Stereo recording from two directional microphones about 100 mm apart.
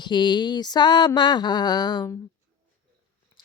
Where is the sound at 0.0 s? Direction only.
50° left (ahead or behind).